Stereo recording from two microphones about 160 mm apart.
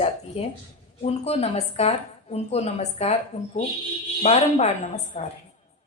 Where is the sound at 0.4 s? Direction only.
40° left (ahead or behind).